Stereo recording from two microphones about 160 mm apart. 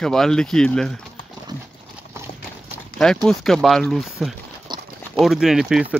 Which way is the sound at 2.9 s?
Centre (ahead or behind).